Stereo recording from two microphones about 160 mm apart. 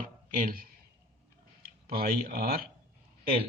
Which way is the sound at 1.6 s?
70° right (ahead or behind).